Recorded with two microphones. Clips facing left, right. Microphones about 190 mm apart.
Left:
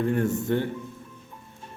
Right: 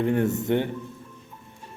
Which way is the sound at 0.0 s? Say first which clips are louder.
Right 1 dB; 20° right (ahead or behind).